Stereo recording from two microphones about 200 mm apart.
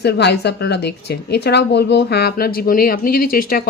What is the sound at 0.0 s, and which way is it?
A woman's voice, 55° left (ahead or behind).